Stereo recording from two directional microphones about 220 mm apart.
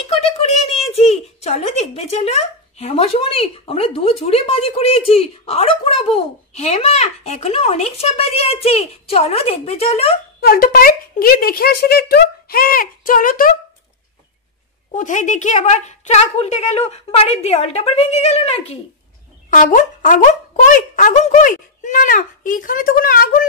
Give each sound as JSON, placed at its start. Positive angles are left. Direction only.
{"t": 0.0, "sound": "a sound", "side_deg": 25}
{"t": 0.9, "sound": "speech", "side_deg": 30}
{"t": 10.4, "sound": "speech", "side_deg": 40}
{"t": 15.0, "sound": "speech", "side_deg": 35}